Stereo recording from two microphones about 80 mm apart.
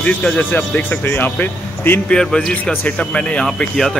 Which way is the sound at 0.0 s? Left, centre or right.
Centre.